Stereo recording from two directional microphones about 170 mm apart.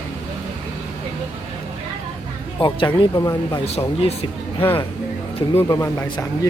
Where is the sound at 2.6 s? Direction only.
25° left (ahead or behind).